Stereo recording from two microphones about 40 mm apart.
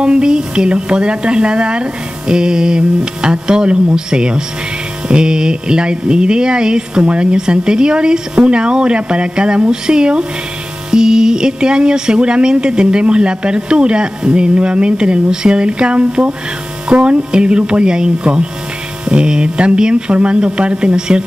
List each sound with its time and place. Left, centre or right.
0.0 s speech: right